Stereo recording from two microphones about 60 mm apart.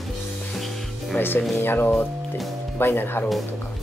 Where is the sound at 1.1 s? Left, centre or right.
Left.